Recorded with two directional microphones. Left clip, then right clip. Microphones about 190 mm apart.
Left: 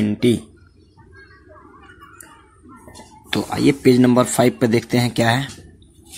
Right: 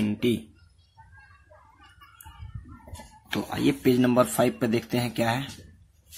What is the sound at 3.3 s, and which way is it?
Speech, 15° left (ahead or behind).